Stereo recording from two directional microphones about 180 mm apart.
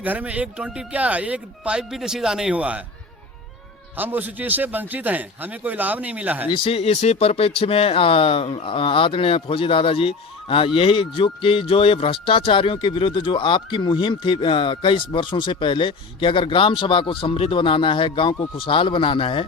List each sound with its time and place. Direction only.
0.0 s speech: 10° right (ahead or behind)
3.9 s speech: 10° right (ahead or behind)
6.5 s speech: 30° left (ahead or behind)